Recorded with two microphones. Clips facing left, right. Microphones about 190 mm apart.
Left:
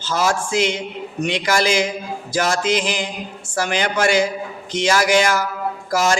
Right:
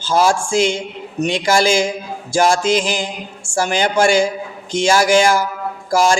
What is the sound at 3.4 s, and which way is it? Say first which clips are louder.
A woman's voice: right 4 dB; 30° right (ahead or behind).